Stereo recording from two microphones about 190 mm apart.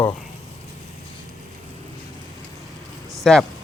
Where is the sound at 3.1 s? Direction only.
Centre (ahead or behind).